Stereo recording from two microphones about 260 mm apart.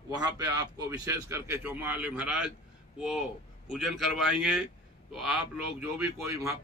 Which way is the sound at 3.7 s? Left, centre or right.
Centre.